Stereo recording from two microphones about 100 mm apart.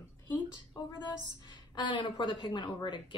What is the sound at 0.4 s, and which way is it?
A woman's voice, 45° left (ahead or behind).